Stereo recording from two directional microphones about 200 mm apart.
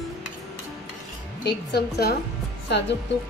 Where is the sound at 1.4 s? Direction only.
55° left (ahead or behind).